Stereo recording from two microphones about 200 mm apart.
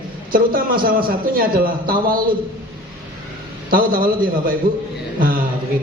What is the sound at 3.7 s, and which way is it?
Speech, 45° right (ahead or behind).